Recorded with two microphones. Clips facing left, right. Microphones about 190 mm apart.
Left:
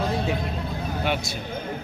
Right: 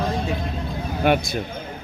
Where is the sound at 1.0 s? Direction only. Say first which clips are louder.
Right 9 dB; 55° right (ahead or behind).